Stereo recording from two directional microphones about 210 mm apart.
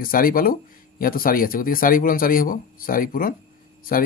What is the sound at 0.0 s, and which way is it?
Speech, 45° left (ahead or behind).